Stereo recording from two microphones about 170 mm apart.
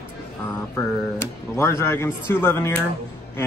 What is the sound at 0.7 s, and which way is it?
A man's voice, 15° left (ahead or behind).